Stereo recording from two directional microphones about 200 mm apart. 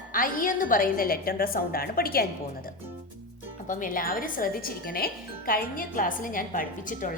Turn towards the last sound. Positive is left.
turn(degrees=40)  # may be behind; listen again after turning